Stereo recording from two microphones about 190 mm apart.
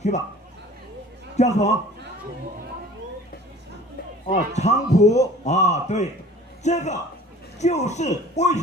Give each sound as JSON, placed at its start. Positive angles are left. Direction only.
{"t": 1.3, "sound": "a man's voice", "side_deg": 35}
{"t": 4.3, "sound": "a man's voice", "side_deg": 35}